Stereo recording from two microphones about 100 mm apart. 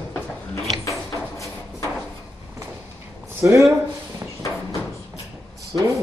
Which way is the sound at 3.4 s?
30° right (ahead or behind).